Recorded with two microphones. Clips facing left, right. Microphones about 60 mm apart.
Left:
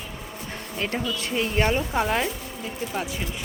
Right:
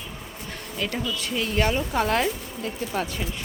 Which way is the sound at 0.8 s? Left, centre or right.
Left.